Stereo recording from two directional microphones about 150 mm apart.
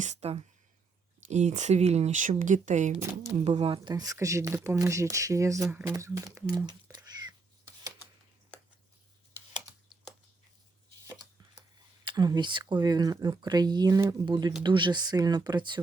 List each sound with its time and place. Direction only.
0.0 s speech: 50° right (ahead or behind)
3.5 s speech: 35° right (ahead or behind)
3.8 s speech: 25° right (ahead or behind)
6.9 s cat: 30° right (ahead or behind)
9.9 s typing: centre (ahead or behind)
12.0 s speech: 30° right (ahead or behind)